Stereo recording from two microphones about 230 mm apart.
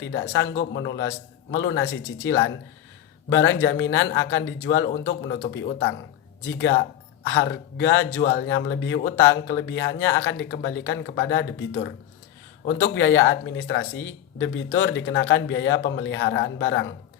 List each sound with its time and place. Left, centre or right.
0.0 s speech: left